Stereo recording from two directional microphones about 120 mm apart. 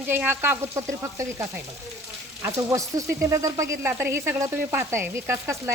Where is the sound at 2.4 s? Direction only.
25° right (ahead or behind).